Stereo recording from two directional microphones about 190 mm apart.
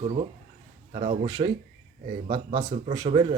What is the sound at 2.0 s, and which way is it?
Speech, 40° right (ahead or behind).